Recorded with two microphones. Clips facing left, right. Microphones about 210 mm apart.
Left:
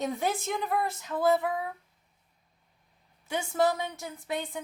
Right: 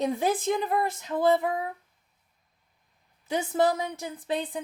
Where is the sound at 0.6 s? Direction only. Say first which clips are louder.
Right 3 dB; 20° right (ahead or behind).